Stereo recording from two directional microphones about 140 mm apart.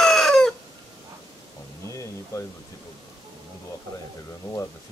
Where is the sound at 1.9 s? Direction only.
20° left (ahead or behind).